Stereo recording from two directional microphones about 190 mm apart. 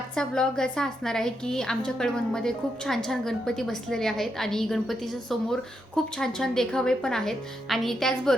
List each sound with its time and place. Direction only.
0.2 s a woman's voice: 5° left (ahead or behind)